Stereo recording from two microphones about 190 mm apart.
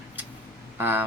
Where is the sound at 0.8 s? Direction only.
10° right (ahead or behind).